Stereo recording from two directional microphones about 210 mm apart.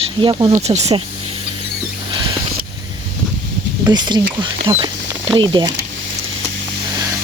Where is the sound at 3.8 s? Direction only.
20° right (ahead or behind).